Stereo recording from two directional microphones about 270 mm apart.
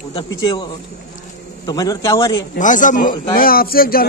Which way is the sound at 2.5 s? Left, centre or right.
Left.